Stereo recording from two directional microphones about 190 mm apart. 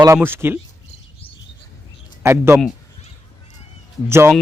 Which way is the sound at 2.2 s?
10° right (ahead or behind).